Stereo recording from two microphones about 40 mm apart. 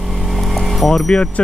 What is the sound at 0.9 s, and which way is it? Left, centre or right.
Speech, centre.